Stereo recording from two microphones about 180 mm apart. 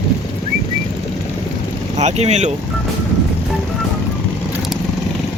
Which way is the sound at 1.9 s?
40° right (ahead or behind).